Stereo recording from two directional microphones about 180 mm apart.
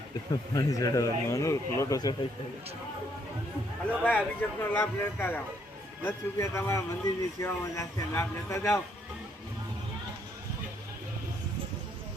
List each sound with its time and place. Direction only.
0.5 s a man's voice: 20° left (ahead or behind)
4.0 s speech: 10° left (ahead or behind)